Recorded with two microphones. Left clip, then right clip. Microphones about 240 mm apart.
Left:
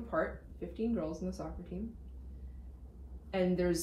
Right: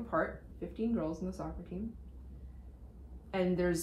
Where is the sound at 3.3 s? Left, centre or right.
Centre.